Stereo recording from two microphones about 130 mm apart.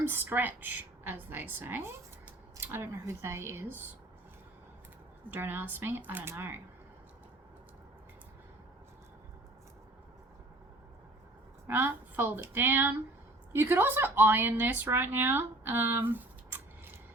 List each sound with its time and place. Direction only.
0.0 s a woman's voice: 15° right (ahead or behind)
5.3 s a woman's voice: 15° right (ahead or behind)
11.7 s a woman's voice: 15° right (ahead or behind)